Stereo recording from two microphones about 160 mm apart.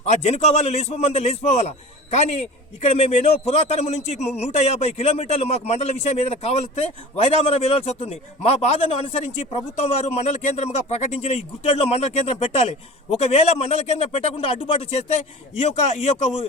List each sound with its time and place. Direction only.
0.0 s a man's voice: 45° left (ahead or behind)